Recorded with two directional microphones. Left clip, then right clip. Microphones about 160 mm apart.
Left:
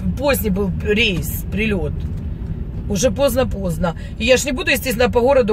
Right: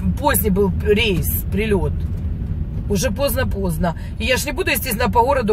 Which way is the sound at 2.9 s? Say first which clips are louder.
Left 4 dB; 20° left (ahead or behind).